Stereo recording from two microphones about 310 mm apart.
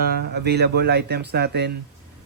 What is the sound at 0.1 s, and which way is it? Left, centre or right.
Speech, right.